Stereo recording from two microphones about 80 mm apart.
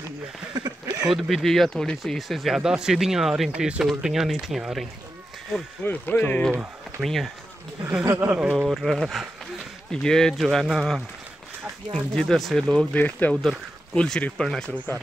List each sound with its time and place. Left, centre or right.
0.6 s a sound: right
1.0 s speech: centre
5.9 s speech: left
7.0 s speech: centre
8.0 s speech: right
8.3 s speech: centre
12.9 s speech: centre
13.9 s speech: centre